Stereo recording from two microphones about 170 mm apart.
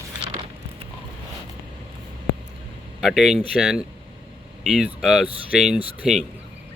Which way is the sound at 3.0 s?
Centre (ahead or behind).